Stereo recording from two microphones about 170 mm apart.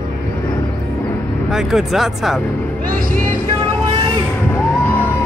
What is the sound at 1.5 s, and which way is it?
Speech, centre (ahead or behind).